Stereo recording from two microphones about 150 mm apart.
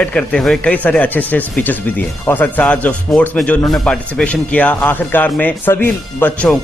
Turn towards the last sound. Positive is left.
turn(degrees=10)  # may be behind; listen again after turning